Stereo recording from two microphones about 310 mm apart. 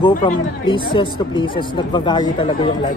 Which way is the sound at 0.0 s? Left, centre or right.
Centre.